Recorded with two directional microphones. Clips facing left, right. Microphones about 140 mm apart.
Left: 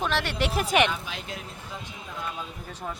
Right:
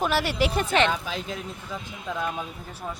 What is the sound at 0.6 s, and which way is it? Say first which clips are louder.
Speech: left 2 dB; 15° left (ahead or behind).